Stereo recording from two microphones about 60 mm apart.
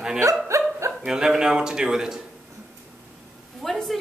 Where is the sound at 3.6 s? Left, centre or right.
Centre.